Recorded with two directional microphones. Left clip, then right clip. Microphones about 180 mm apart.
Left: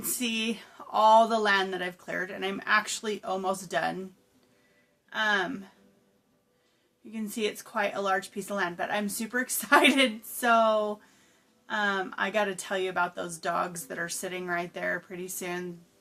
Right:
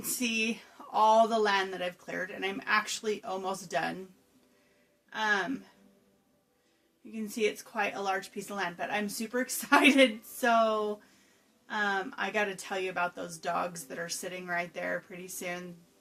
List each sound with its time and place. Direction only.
0.0 s speech: 35° left (ahead or behind)
5.0 s speech: 40° left (ahead or behind)
7.1 s speech: 40° left (ahead or behind)